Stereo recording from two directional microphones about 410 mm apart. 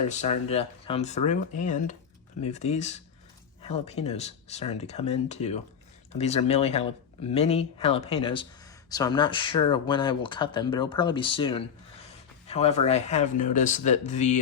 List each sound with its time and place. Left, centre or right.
0.1 s speech: centre